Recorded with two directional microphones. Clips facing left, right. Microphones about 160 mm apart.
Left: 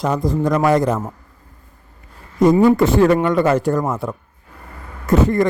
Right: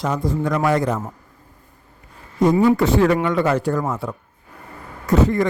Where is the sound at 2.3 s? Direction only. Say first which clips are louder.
Left 3 dB; 45° left (ahead or behind).